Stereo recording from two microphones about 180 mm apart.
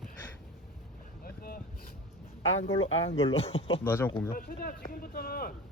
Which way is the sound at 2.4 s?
90° left.